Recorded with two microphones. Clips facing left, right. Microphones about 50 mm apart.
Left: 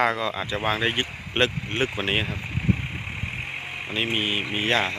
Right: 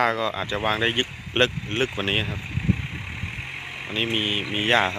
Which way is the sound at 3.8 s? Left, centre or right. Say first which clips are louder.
Right 1 dB; centre.